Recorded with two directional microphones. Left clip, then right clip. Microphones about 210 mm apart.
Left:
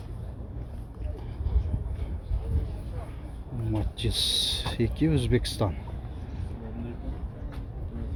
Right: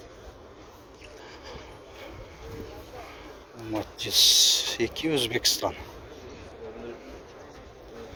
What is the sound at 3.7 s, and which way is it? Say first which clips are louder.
Speech: right 7 dB; 15° right (ahead or behind).